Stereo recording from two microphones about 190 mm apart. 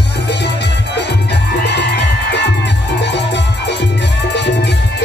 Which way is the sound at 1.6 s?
65° left (ahead or behind).